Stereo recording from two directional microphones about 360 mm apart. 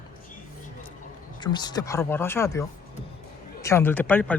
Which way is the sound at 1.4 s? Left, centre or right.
Centre.